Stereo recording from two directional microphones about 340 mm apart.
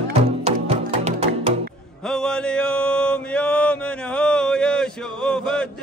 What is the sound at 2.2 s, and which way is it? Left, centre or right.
Mantra, centre.